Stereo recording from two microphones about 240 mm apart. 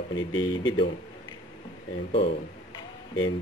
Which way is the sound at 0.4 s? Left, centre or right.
Centre.